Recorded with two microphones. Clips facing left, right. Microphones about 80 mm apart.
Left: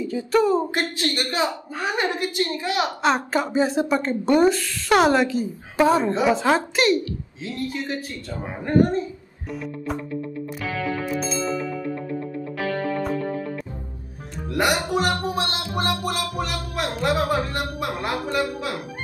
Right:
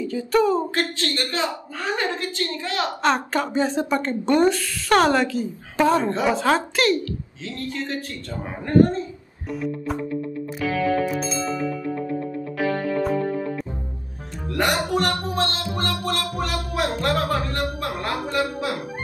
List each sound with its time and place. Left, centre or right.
0.0 s speech: centre
0.9 s a woman's voice: centre
3.0 s a woman's voice: centre
7.4 s a woman's voice: centre
10.6 s music: centre
14.5 s music: centre
16.3 s speech: centre
17.3 s a woman's voice: centre